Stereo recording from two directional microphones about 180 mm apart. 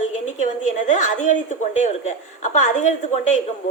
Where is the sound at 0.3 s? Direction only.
40° left (ahead or behind).